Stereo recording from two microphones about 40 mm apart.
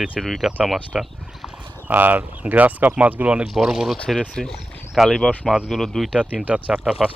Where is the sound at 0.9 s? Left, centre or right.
Centre.